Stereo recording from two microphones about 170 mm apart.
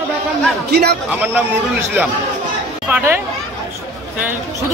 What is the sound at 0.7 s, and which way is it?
Speech, 70° right (ahead or behind).